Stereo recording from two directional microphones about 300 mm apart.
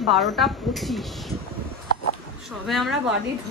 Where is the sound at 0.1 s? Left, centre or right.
Centre.